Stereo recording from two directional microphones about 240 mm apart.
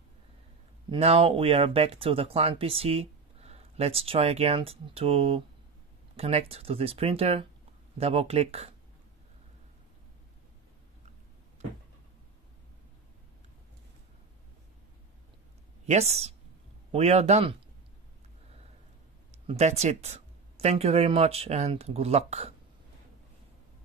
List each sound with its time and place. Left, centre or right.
0.8 s speech: right
15.8 s speech: right
19.3 s speech: right